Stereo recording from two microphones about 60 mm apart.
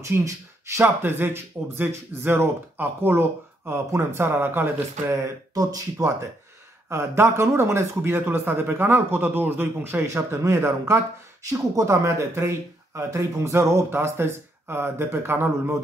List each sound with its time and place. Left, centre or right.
0.0 s speech: right
0.7 s speech: right
5.5 s speech: right
6.9 s speech: right
10.0 s speech: right
11.4 s speech: right